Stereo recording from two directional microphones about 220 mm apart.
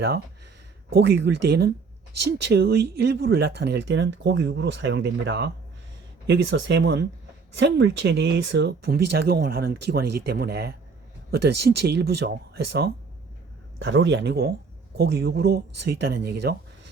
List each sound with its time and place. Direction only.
0.9 s speech: 50° right (ahead or behind)